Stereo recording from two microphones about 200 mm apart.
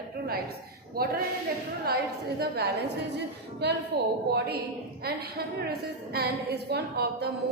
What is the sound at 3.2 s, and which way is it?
A woman's voice, 55° right (ahead or behind).